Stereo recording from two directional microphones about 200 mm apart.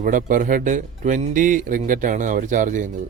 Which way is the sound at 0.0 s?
40° right (ahead or behind).